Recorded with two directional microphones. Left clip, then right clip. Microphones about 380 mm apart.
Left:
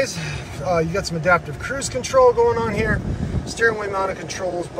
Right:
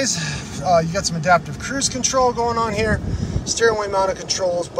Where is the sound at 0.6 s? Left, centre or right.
Right.